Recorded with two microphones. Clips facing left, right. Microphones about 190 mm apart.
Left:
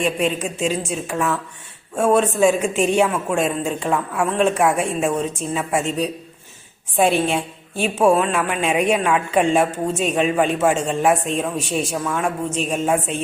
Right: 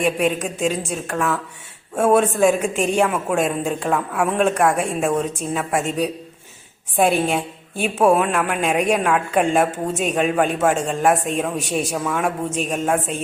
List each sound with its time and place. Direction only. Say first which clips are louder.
0.0 s speech: right 1 dB; 5° right (ahead or behind)
7.3 s speech: even; centre (ahead or behind)